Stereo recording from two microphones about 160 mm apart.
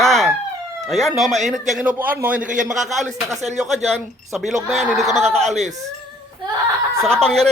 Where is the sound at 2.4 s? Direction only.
55° right (ahead or behind).